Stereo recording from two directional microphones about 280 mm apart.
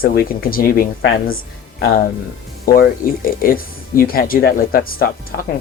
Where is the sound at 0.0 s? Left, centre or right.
Left.